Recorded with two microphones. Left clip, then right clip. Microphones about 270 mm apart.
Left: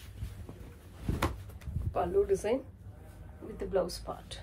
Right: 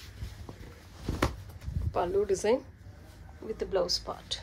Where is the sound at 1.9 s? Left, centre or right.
Right.